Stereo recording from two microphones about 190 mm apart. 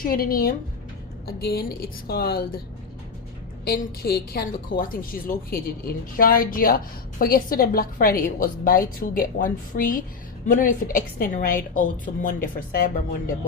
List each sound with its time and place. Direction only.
0.0 s a woman's voice: 50° left (ahead or behind)
3.6 s a woman's voice: 55° left (ahead or behind)